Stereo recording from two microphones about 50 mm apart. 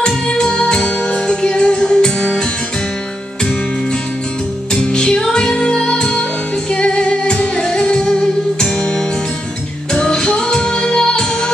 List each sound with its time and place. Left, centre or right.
0.0 s music: centre
4.7 s music: centre